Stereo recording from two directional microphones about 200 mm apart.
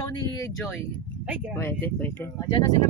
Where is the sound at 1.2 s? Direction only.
5° right (ahead or behind).